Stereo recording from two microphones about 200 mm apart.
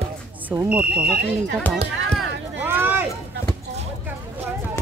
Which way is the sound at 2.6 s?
10° right (ahead or behind).